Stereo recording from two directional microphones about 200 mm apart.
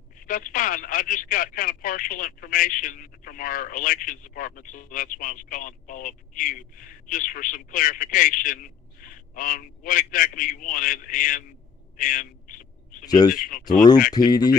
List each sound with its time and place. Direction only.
0.3 s a man's voice: 40° left (ahead or behind)
13.0 s speech: 20° left (ahead or behind)
13.3 s speech: 45° left (ahead or behind)
14.1 s speech: 20° left (ahead or behind)